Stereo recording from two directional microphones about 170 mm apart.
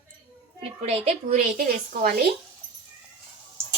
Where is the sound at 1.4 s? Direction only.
55° right (ahead or behind).